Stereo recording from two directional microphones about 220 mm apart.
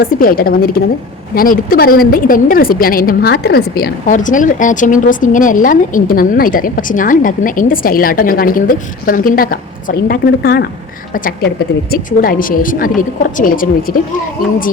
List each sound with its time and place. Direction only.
0.0 s a woman's voice: 40° left (ahead or behind)
11.9 s a woman's voice: 40° left (ahead or behind)